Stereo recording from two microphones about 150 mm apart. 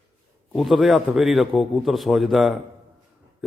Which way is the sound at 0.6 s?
Centre (ahead or behind).